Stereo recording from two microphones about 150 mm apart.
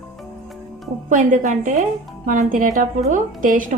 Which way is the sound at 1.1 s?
60° right (ahead or behind).